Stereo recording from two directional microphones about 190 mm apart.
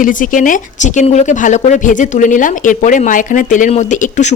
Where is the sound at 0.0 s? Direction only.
45° left (ahead or behind).